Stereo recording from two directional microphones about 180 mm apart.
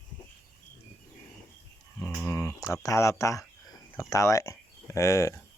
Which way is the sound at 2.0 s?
10° left (ahead or behind).